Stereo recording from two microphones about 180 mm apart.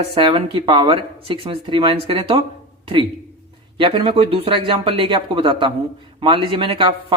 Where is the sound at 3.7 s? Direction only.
30° right (ahead or behind).